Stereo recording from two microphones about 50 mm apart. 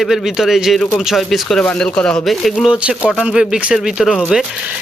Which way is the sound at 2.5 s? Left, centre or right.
Centre.